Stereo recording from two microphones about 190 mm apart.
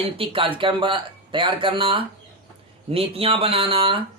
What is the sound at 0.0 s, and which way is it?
A man's voice, 30° right (ahead or behind).